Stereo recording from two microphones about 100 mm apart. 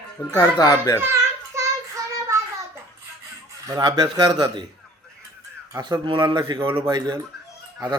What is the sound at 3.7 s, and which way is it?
Speech, 45° right (ahead or behind).